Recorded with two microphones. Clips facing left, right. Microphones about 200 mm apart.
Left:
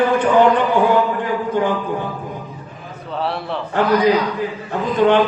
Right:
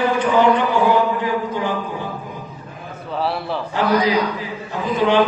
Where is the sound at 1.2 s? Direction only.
55° left (ahead or behind).